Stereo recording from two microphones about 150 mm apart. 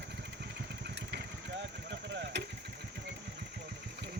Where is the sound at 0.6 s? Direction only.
90° right.